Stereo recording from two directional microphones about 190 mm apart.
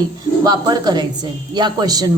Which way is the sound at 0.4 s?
20° right (ahead or behind).